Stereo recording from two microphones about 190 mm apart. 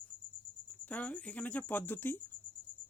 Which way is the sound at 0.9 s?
10° left (ahead or behind).